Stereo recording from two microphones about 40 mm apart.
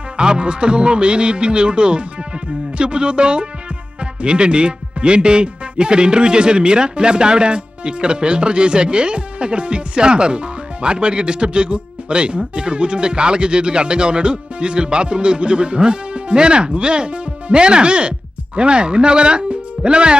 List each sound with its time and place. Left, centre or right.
0.2 s speech: right